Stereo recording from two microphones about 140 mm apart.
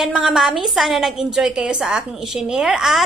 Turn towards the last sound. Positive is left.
turn(degrees=0)  # may be behind; listen again after turning